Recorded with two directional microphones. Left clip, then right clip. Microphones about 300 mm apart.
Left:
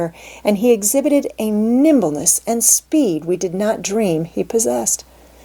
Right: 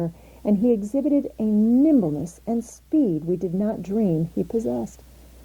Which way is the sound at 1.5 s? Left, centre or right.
Centre.